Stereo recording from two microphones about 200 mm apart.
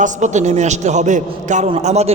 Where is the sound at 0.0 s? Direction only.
35° right (ahead or behind).